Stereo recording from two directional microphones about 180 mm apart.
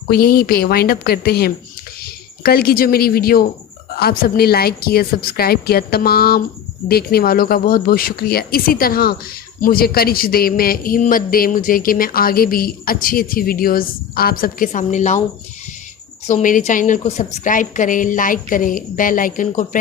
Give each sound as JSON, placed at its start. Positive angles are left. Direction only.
{"t": 0.1, "sound": "a woman's voice", "side_deg": 55}
{"t": 16.2, "sound": "a man's voice", "side_deg": 45}